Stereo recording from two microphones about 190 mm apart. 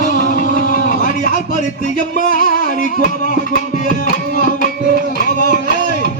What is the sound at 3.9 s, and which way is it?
Music, 45° left (ahead or behind).